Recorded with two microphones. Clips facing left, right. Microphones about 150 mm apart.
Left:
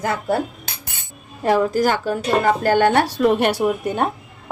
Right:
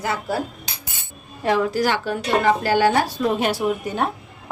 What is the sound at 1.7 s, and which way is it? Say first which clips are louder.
Speech: left 3 dB; 45° left (ahead or behind).